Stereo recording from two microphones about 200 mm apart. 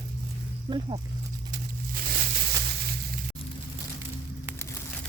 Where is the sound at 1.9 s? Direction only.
45° right (ahead or behind).